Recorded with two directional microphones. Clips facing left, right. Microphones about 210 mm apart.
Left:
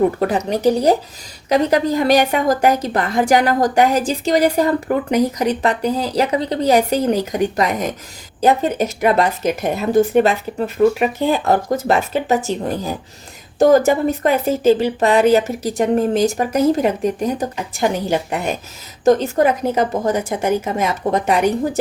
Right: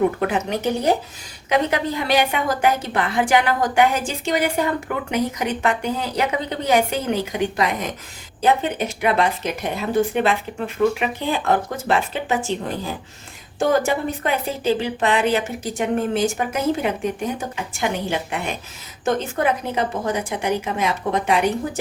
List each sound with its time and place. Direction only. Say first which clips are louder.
0.2 s a woman's voice: left 4 dB; 35° left (ahead or behind)